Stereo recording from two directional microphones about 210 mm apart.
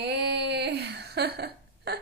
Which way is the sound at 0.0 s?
55° right (ahead or behind).